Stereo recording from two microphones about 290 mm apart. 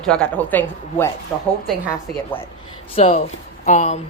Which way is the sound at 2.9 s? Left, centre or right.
Centre.